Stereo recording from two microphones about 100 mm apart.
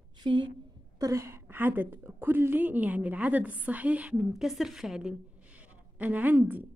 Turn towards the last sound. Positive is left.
turn(degrees=-20)  # may be behind; listen again after turning